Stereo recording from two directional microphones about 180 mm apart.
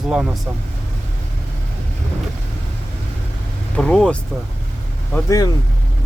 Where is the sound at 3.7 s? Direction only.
5° left (ahead or behind).